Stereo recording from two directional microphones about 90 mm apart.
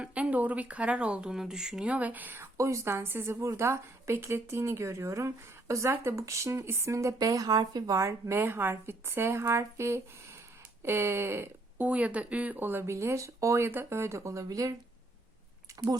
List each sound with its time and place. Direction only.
0.0 s speech: 15° right (ahead or behind); by 7.9 s 50° right (ahead or behind)
7.9 s speech: 30° right (ahead or behind)
11.9 s speech: 15° right (ahead or behind); by 14.7 s 35° right (ahead or behind)